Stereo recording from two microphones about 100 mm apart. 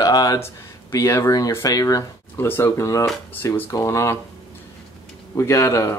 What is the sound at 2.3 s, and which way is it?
Speech, 20° left (ahead or behind).